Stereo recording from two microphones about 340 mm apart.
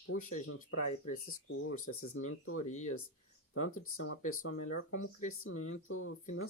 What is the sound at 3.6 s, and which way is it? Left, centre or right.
Speech, left.